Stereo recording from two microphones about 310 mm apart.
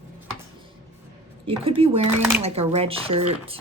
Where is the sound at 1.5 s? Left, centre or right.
Centre.